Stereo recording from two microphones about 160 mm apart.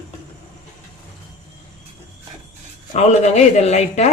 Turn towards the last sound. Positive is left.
turn(degrees=45)  # may be behind; listen again after turning